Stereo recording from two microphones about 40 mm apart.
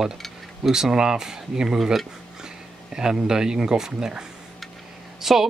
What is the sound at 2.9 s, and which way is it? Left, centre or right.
Speech, centre.